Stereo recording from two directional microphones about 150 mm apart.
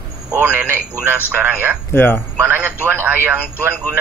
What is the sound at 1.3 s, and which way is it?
Speech, 10° right (ahead or behind).